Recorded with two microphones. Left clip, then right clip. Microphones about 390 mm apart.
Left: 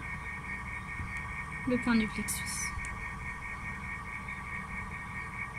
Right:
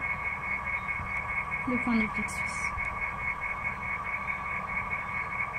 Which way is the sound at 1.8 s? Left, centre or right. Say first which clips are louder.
Right 3 dB; left.